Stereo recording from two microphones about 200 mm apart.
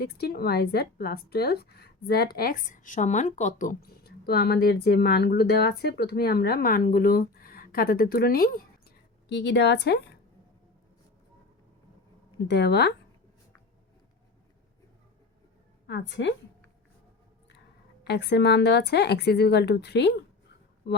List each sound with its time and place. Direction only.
0.0 s a woman's voice: 50° left (ahead or behind)
9.3 s speech: 60° left (ahead or behind)
12.5 s speech: 55° left (ahead or behind)
15.9 s speech: 60° left (ahead or behind)
18.0 s speech: 55° left (ahead or behind)